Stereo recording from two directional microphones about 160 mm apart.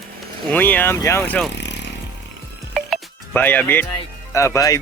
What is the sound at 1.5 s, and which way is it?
Vehicle, 90° left.